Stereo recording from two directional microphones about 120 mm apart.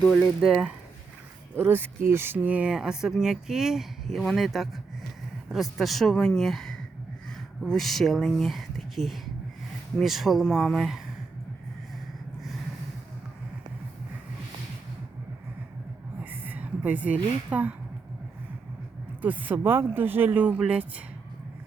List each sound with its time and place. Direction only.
0.0 s speech: 10° left (ahead or behind)
1.5 s speech: 15° right (ahead or behind); by 11.0 s centre (ahead or behind)
16.2 s a sound: 15° right (ahead or behind)
19.2 s speech: 15° right (ahead or behind)